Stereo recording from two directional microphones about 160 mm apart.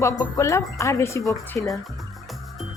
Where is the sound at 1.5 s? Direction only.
5° left (ahead or behind).